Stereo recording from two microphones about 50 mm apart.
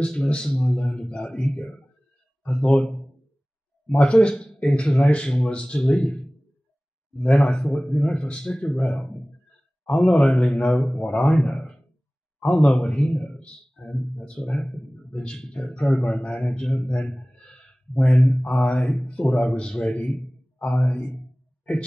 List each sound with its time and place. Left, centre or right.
0.0 s a man's voice: centre
2.4 s speech: left
7.2 s a man's voice: centre
16.8 s a sound: left
18.7 s speech: left